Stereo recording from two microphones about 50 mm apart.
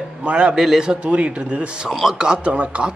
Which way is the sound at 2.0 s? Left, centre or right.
Centre.